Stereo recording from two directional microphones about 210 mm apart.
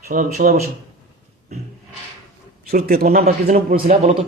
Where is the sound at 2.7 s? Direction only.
45° right (ahead or behind).